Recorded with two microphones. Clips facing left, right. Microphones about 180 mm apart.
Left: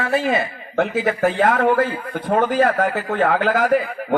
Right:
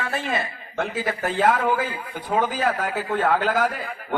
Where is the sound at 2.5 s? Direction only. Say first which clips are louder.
Left 7 dB; 60° left (ahead or behind).